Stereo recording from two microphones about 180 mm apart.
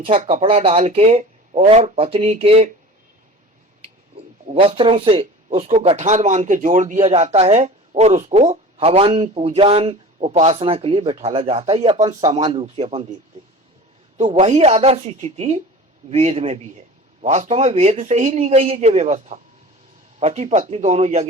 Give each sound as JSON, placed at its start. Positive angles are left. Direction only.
{"t": 0.0, "sound": "speech", "side_deg": -35}
{"t": 4.1, "sound": "speech", "side_deg": -30}
{"t": 14.2, "sound": "speech", "side_deg": -35}